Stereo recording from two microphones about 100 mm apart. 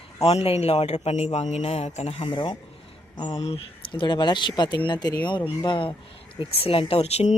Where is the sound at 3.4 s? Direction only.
85° left.